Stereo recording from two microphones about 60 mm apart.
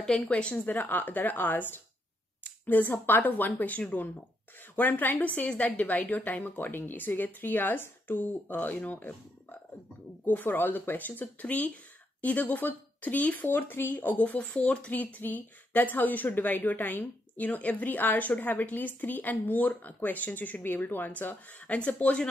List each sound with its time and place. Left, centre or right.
0.3 s speech: left